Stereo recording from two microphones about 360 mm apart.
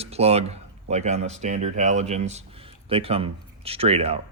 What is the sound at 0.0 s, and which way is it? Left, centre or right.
Speech, centre.